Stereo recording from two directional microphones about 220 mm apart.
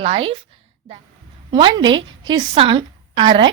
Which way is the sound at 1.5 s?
20° right (ahead or behind).